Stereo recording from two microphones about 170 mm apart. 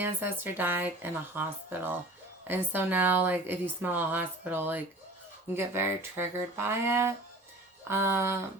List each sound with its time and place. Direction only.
0.0 s speech: 15° right (ahead or behind)